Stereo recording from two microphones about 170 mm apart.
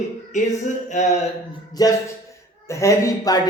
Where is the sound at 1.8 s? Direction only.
20° left (ahead or behind).